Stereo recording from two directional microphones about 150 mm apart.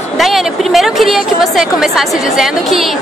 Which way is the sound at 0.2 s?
Centre (ahead or behind).